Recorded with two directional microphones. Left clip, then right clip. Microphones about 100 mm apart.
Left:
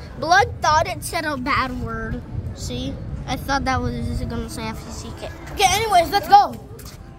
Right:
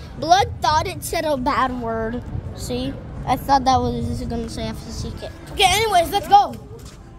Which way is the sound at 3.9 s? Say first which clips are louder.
Right 3 dB; 40° right (ahead or behind).